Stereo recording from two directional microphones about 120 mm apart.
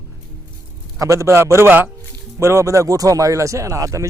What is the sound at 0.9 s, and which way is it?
Speech, 25° right (ahead or behind).